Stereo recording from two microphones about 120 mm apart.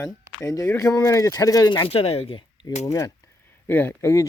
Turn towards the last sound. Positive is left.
turn(degrees=25)  # may be behind; listen again after turning